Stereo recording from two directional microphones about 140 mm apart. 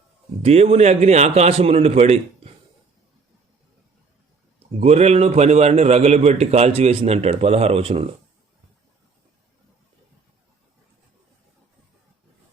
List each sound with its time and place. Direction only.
0.4 s a man's voice: 45° right (ahead or behind)
4.8 s a man's voice: 50° right (ahead or behind)